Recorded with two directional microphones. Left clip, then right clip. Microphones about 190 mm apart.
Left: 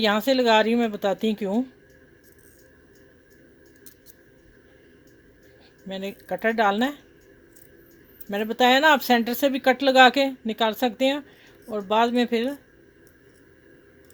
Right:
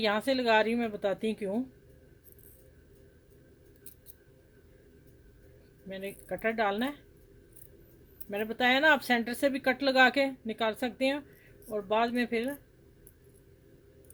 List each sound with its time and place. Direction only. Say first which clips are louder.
0.0 s speech: left 8 dB; 35° left (ahead or behind)
5.9 s speech: left 7 dB; 35° left (ahead or behind)
8.3 s speech: left 8 dB; 35° left (ahead or behind)